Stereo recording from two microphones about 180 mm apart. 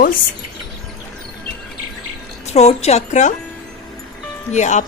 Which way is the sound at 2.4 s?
35° left (ahead or behind).